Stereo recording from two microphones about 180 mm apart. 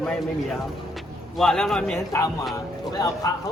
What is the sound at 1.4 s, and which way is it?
Speech, 5° left (ahead or behind).